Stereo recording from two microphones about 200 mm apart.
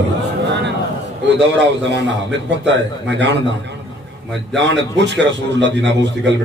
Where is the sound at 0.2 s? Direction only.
60° right (ahead or behind).